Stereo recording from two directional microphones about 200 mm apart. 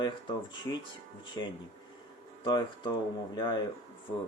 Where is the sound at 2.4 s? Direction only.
20° left (ahead or behind).